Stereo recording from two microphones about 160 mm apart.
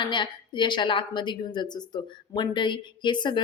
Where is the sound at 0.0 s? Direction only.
30° left (ahead or behind).